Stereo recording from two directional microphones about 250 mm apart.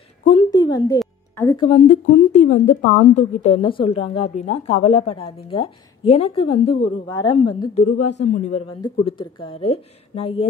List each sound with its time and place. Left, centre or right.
0.2 s a sound: left
0.5 s a woman's voice: centre
0.9 s music: centre
1.6 s a woman's voice: left
8.0 s speech: left
8.3 s a woman's voice: left